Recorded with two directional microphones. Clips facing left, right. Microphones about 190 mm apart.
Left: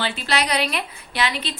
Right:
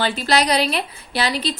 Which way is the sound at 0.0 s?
40° right (ahead or behind).